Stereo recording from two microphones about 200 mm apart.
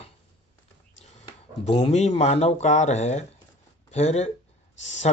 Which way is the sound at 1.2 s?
25° left (ahead or behind).